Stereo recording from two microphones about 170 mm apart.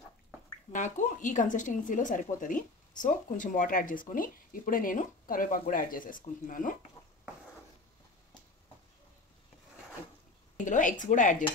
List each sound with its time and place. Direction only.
0.7 s speech: 45° left (ahead or behind)
10.6 s speech: 50° left (ahead or behind)